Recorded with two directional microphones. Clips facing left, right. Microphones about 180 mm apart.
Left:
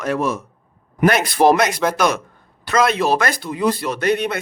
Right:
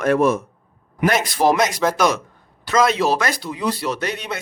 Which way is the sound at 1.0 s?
60° left (ahead or behind).